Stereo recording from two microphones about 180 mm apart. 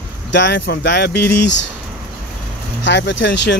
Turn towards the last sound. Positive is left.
turn(degrees=80)